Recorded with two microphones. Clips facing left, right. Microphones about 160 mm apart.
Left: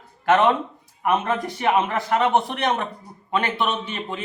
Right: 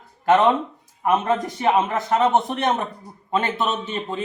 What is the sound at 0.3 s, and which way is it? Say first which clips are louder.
Speech: right 1 dB; 20° right (ahead or behind).